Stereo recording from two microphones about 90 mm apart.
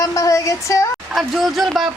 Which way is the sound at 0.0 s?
40° left (ahead or behind).